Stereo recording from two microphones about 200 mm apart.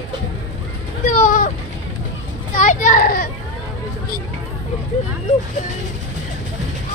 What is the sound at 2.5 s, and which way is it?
Children playing, 40° left (ahead or behind).